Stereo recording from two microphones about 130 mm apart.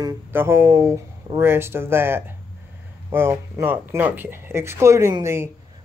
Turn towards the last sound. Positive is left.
turn(degrees=-20)  # may be behind; listen again after turning